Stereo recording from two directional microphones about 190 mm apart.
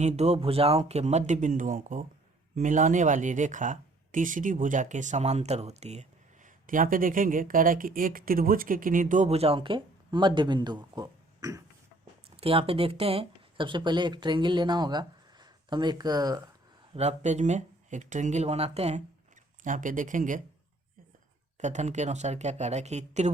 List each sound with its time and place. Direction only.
0.0 s speech: 35° right (ahead or behind); by 11.6 s 20° right (ahead or behind)
12.4 s speech: 30° right (ahead or behind)
16.9 s speech: 35° right (ahead or behind)
21.6 s speech: 40° right (ahead or behind)